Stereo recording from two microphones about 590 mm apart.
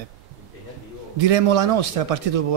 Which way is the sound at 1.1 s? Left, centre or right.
Right.